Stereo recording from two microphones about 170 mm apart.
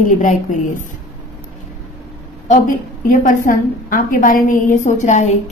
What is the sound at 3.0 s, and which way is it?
A woman's voice, 55° left (ahead or behind).